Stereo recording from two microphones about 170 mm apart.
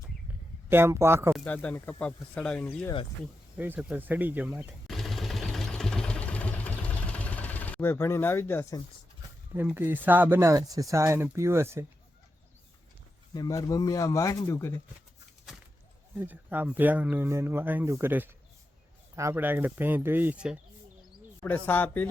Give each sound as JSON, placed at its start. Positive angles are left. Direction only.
{"t": 0.7, "sound": "speech", "side_deg": -15}
{"t": 1.3, "sound": "speech", "side_deg": 10}
{"t": 3.6, "sound": "a sound", "side_deg": -10}
{"t": 9.7, "sound": "speech", "side_deg": -10}
{"t": 13.3, "sound": "a man's voice", "side_deg": 20}
{"t": 15.5, "sound": "a sound", "side_deg": -5}
{"t": 16.1, "sound": "speech", "side_deg": -10}
{"t": 21.4, "sound": "speech", "side_deg": 10}